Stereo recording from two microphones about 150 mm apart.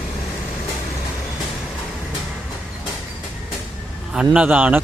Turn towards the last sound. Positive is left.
turn(degrees=-10)  # may be behind; listen again after turning